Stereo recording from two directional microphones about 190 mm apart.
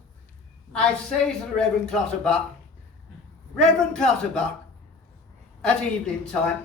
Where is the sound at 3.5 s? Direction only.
5° left (ahead or behind).